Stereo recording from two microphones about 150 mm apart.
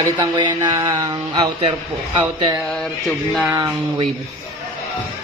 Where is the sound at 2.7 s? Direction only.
5° left (ahead or behind).